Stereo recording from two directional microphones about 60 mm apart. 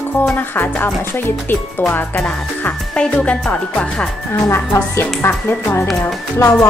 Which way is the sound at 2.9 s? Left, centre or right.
Centre.